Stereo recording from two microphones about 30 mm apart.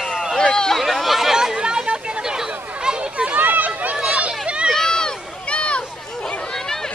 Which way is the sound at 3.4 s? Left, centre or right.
Right.